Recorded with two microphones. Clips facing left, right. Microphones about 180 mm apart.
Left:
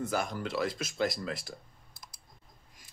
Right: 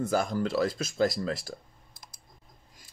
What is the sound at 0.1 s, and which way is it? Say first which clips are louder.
Speech: right 5 dB; 35° right (ahead or behind).